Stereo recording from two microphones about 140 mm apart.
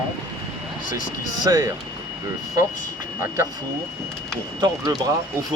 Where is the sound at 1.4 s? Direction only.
25° right (ahead or behind).